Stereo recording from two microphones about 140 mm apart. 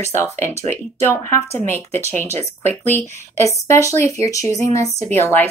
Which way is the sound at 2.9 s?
20° left (ahead or behind).